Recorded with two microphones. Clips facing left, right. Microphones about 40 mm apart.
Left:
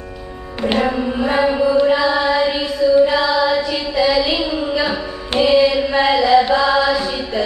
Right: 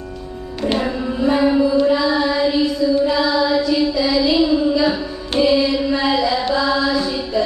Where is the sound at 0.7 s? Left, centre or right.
Left.